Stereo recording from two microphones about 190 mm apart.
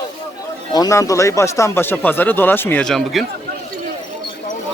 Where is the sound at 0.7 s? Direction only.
20° left (ahead or behind); by 3.2 s centre (ahead or behind).